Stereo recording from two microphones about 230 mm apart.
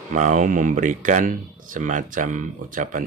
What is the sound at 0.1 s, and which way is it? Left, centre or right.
Speech, right.